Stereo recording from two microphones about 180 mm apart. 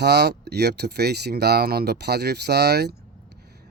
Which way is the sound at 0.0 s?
65° right (ahead or behind).